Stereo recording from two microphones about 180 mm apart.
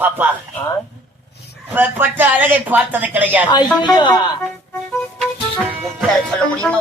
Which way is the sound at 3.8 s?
25° left (ahead or behind).